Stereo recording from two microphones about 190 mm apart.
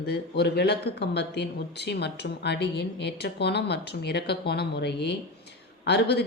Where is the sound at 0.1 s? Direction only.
60° left (ahead or behind).